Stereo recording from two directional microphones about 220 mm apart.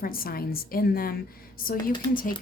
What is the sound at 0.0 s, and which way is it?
Speech, 40° left (ahead or behind).